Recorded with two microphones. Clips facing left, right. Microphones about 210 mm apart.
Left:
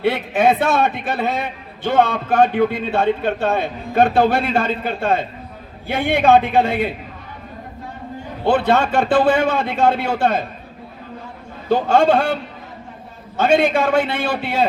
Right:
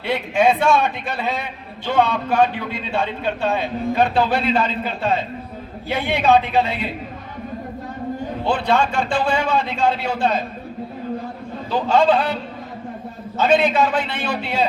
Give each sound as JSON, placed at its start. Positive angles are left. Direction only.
{"t": 0.0, "sound": "a man's voice", "side_deg": 50}
{"t": 8.4, "sound": "a man's voice", "side_deg": 55}
{"t": 11.7, "sound": "a man's voice", "side_deg": 55}